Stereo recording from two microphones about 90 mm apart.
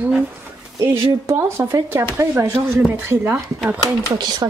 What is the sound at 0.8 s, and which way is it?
Speech, 30° right (ahead or behind).